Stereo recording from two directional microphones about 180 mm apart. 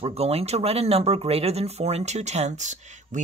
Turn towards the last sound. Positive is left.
turn(degrees=-40)  # may be behind; listen again after turning